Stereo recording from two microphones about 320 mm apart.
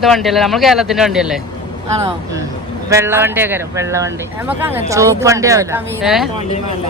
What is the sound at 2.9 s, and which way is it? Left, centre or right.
Speech, centre.